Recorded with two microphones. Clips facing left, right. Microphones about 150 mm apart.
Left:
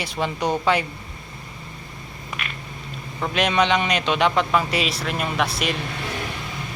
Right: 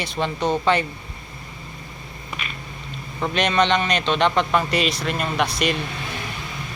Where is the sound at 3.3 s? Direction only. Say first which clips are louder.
Even; 5° left (ahead or behind).